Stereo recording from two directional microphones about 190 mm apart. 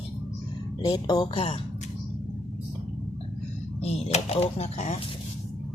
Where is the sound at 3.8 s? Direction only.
35° left (ahead or behind).